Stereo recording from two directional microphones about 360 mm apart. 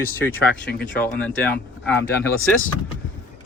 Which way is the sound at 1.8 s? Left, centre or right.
Centre.